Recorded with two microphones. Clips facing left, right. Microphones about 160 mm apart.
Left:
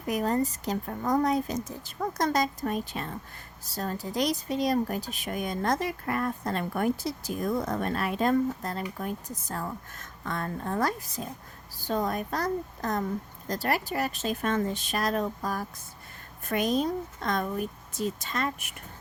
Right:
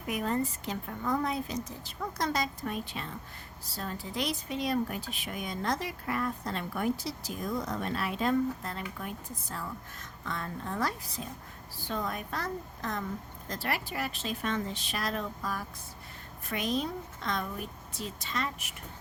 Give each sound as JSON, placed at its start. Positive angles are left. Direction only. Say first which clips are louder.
{"t": 0.1, "sound": "a woman's voice", "louder": "left 4 dB", "side_deg": 40}